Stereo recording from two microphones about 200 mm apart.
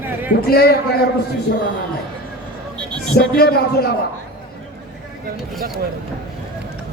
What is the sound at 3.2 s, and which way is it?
Speech, 50° left (ahead or behind).